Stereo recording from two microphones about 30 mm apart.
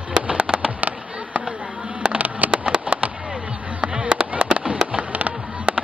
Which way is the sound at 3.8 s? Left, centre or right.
Right.